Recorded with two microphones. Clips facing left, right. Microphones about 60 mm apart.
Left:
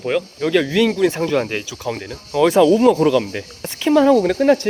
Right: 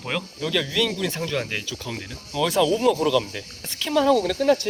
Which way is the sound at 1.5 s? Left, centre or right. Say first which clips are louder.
Left 6 dB; centre.